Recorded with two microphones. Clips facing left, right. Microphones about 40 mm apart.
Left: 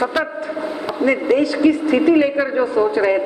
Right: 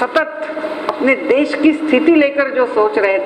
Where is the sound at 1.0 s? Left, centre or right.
Right.